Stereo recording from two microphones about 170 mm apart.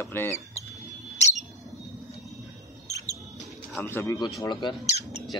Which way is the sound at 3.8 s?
15° left (ahead or behind).